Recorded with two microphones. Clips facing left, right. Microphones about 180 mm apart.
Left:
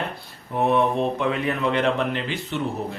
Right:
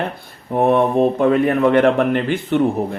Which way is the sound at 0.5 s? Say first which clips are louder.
Right 6 dB; 55° right (ahead or behind).